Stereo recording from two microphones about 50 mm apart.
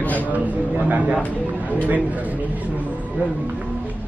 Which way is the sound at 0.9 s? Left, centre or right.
Right.